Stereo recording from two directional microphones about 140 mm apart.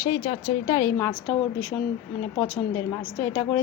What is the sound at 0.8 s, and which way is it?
Speech, 10° left (ahead or behind).